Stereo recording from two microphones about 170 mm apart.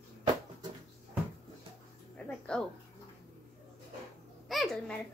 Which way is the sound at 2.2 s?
5° left (ahead or behind).